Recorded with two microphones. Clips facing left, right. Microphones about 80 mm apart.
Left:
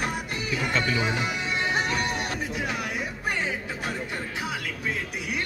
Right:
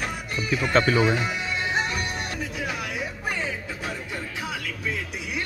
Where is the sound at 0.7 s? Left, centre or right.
Right.